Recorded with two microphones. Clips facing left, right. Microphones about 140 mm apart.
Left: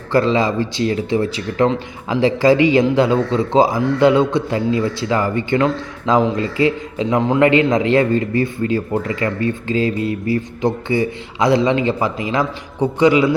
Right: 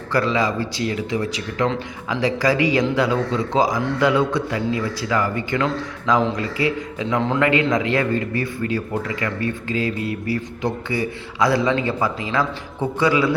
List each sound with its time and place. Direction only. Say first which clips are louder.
0.1 s a man's voice: left 5 dB; 25° left (ahead or behind)